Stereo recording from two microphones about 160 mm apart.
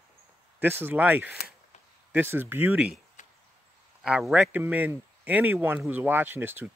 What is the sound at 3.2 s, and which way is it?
Chop, 50° left (ahead or behind).